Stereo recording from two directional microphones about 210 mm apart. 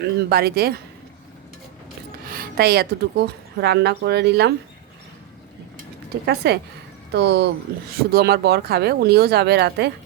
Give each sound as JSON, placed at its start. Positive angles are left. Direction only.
{"t": 0.0, "sound": "speech", "side_deg": -50}
{"t": 2.3, "sound": "speech", "side_deg": -45}
{"t": 6.2, "sound": "speech", "side_deg": -50}